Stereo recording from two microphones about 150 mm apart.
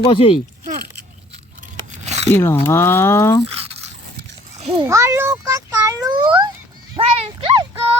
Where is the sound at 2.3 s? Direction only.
15° left (ahead or behind).